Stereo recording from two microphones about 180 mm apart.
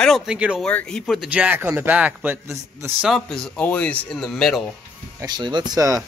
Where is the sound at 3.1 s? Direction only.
Centre (ahead or behind).